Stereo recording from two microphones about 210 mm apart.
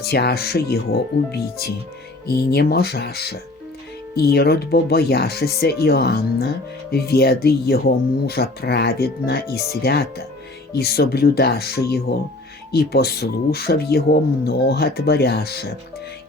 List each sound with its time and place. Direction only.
0.0 s speech: 50° left (ahead or behind)